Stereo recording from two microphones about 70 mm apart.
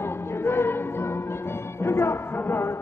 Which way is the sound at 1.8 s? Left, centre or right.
Left.